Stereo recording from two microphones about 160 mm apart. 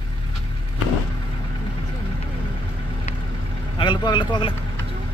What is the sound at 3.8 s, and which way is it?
Speech, 30° left (ahead or behind).